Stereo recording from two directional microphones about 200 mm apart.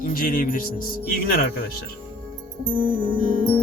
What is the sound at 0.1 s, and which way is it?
Speech, 45° left (ahead or behind).